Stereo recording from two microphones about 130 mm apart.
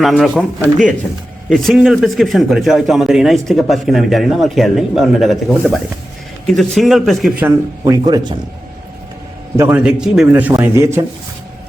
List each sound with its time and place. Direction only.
0.0 s speech: centre (ahead or behind)
7.9 s speech: 30° right (ahead or behind)
9.6 s speech: 20° right (ahead or behind)
9.8 s speech: 5° right (ahead or behind)
10.6 s speech: 20° right (ahead or behind)